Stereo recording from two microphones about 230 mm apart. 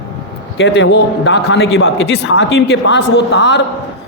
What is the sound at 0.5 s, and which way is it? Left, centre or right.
A man's voice, left.